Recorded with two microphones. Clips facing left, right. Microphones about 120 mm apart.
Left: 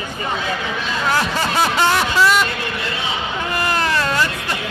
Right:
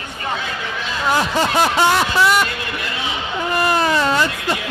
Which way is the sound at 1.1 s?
20° right (ahead or behind).